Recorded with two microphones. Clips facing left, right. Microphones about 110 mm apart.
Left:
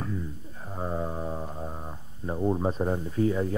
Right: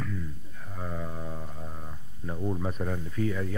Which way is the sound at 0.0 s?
30° left (ahead or behind).